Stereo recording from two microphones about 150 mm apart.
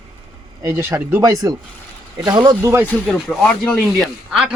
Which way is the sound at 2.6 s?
15° right (ahead or behind).